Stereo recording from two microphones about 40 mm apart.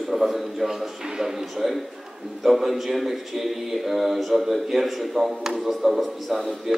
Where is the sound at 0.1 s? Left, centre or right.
Centre.